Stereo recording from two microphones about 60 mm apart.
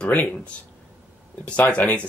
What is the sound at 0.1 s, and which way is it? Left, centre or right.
Speech, left.